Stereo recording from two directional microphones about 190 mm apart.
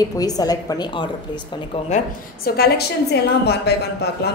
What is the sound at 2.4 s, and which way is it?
A woman's voice, 55° left (ahead or behind).